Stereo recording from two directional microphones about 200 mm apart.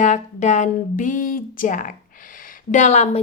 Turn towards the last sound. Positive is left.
turn(degrees=35)  # may be behind; listen again after turning